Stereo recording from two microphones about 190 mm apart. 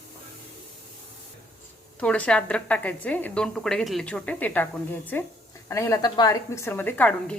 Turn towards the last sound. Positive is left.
turn(degrees=10)  # may be behind; listen again after turning